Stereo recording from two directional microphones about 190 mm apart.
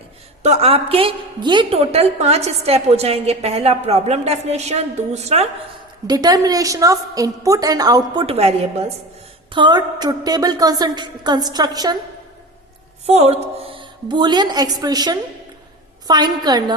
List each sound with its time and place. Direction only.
0.4 s a woman's voice: 35° right (ahead or behind)
6.1 s a woman's voice: 20° right (ahead or behind)
13.1 s a woman's voice: 35° right (ahead or behind)